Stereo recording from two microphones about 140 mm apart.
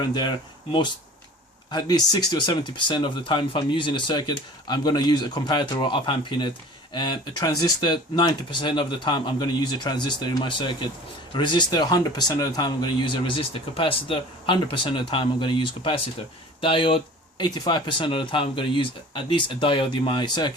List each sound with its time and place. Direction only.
0.0 s speech: 30° left (ahead or behind)